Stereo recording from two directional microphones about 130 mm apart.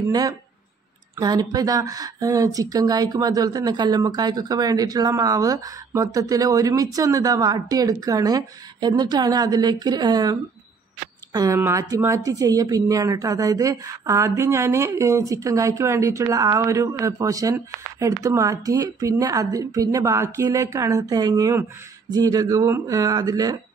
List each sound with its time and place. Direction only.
0.1 s speech: 30° right (ahead or behind)
11.3 s speech: 30° right (ahead or behind)